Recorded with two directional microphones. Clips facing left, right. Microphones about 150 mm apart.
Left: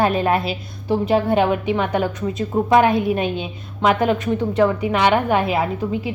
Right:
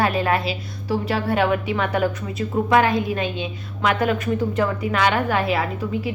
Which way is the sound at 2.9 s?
65° left (ahead or behind).